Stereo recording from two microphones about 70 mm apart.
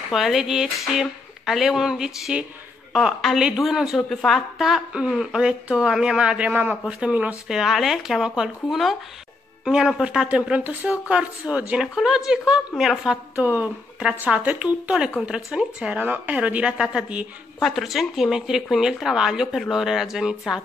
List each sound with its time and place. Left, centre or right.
0.1 s speech: centre
4.1 s a woman's voice: centre
4.6 s a woman's voice: centre
6.5 s a man's voice: right
6.9 s a woman's voice: centre
7.4 s a woman's voice: centre
10.2 s a woman's voice: centre
11.8 s a woman's voice: centre
13.4 s a man's voice: right
17.6 s speech: centre